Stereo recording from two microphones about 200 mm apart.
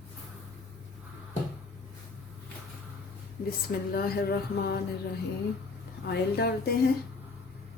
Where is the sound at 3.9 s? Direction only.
50° left (ahead or behind).